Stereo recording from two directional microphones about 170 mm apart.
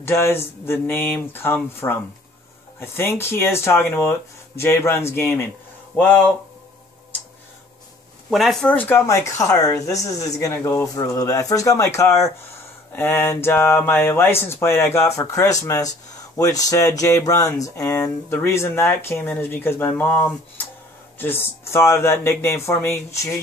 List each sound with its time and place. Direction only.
0.0 s speech: 15° left (ahead or behind)
8.3 s speech: centre (ahead or behind)